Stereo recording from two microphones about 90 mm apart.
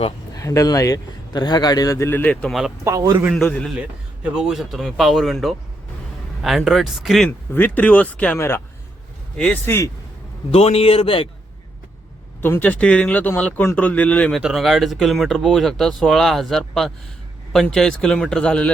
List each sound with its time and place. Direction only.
0.3 s speech: 40° left (ahead or behind)
2.0 s speech: 25° left (ahead or behind)
2.3 s speech: 10° left (ahead or behind)
2.8 s a man's voice: 40° right (ahead or behind)
3.3 s speech: 10° left (ahead or behind)
3.8 s speech: 10° right (ahead or behind)
7.3 s speech: 20° left (ahead or behind)
8.4 s speech: 30° left (ahead or behind)
9.6 s speech: 30° left (ahead or behind)
10.8 s a man's voice: 90° left
12.4 s speech: 20° left (ahead or behind)
14.3 s speech: centre (ahead or behind)